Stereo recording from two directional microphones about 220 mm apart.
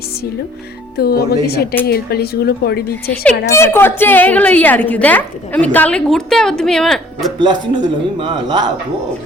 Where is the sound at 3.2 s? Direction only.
10° left (ahead or behind).